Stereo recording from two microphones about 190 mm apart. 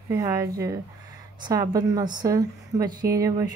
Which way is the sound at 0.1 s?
15° right (ahead or behind).